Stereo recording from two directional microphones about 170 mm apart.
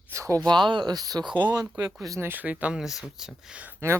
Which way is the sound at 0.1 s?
20° right (ahead or behind).